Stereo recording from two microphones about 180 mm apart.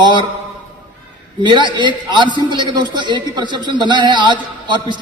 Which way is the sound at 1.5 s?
25° right (ahead or behind).